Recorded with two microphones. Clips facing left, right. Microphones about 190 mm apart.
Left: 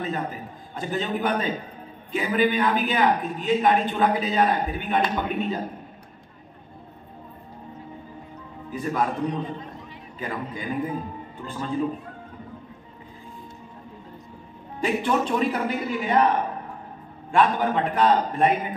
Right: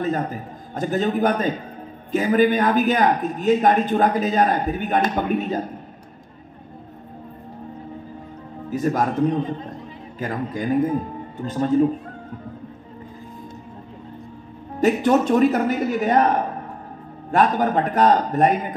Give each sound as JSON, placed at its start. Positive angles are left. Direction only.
{"t": 0.0, "sound": "a man's voice", "side_deg": -45}
{"t": 8.7, "sound": "a man's voice", "side_deg": -45}
{"t": 14.8, "sound": "a man's voice", "side_deg": -40}